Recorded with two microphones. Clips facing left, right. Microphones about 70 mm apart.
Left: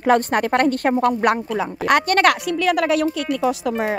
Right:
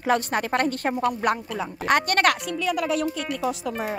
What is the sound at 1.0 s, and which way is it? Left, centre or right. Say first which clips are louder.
Speech: left 6 dB; left.